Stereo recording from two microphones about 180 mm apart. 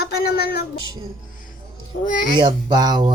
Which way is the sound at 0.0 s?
60° left (ahead or behind).